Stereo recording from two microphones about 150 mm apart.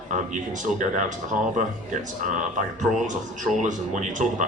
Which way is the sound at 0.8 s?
55° right (ahead or behind).